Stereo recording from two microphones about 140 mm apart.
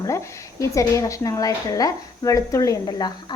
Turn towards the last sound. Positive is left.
turn(degrees=30)  # may be behind; listen again after turning